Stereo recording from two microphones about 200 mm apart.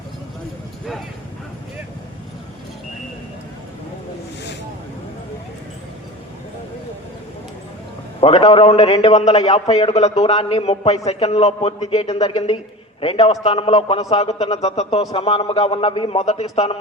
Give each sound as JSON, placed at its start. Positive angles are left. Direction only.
{"t": 8.2, "sound": "a man's voice", "side_deg": 30}